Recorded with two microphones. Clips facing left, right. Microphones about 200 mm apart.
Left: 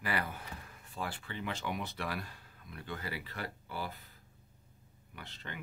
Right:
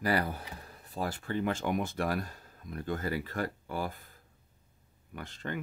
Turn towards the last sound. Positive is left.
turn(degrees=-45)  # may be behind; listen again after turning